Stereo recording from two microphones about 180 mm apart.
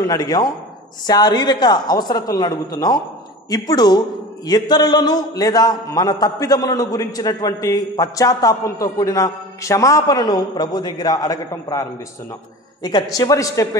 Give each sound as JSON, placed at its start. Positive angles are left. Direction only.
{"t": 0.0, "sound": "a man's voice", "side_deg": 20}